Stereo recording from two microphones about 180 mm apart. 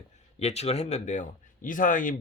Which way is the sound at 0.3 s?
35° left (ahead or behind).